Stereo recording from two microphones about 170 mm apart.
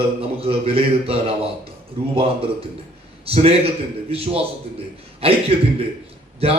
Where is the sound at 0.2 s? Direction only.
35° right (ahead or behind).